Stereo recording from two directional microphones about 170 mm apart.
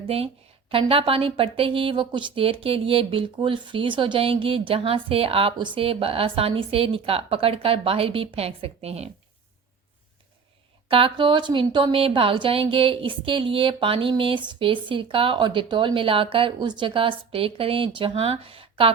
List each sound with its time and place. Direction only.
0.7 s a woman's voice: 30° right (ahead or behind)
10.8 s a woman's voice: 30° right (ahead or behind)